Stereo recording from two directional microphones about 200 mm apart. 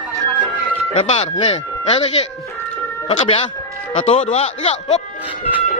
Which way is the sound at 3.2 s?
30° left (ahead or behind).